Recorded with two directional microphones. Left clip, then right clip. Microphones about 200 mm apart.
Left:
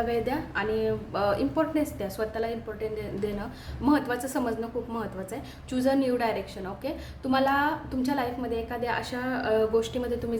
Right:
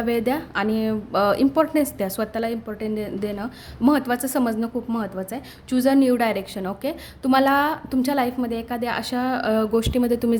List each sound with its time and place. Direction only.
0.1 s a woman's voice: 55° right (ahead or behind)